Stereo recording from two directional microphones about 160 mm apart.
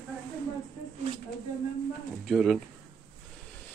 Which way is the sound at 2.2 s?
Centre (ahead or behind).